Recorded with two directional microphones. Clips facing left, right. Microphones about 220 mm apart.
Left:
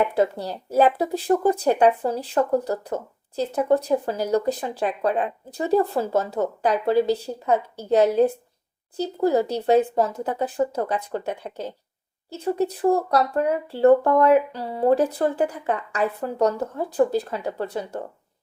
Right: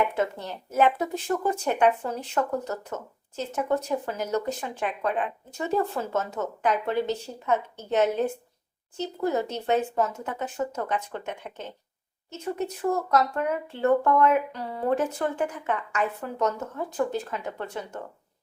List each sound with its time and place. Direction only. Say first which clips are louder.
0.0 s speech: left 5 dB; 35° left (ahead or behind)